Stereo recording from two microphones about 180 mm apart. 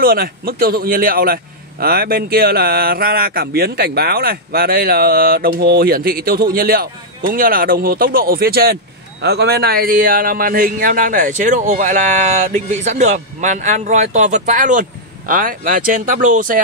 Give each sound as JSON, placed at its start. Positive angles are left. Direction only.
{"t": 0.0, "sound": "a man's voice", "side_deg": -55}